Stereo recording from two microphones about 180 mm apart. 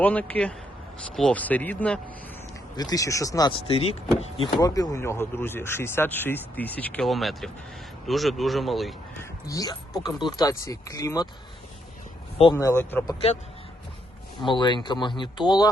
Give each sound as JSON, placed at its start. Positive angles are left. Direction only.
{"t": 0.0, "sound": "speech", "side_deg": 10}
{"t": 2.7, "sound": "speech", "side_deg": 20}
{"t": 3.7, "sound": "speech", "side_deg": 35}
{"t": 9.5, "sound": "speech", "side_deg": 20}
{"t": 12.5, "sound": "speech", "side_deg": 15}
{"t": 14.4, "sound": "speech", "side_deg": 25}